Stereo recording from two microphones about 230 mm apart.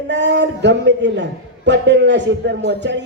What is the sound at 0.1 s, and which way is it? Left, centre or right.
A man's voice, right.